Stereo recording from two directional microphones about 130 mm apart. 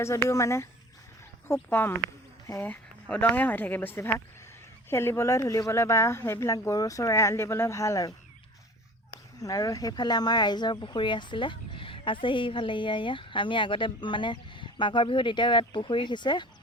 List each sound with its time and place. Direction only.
0.0 s speech: 25° left (ahead or behind)
9.4 s speech: 25° left (ahead or behind)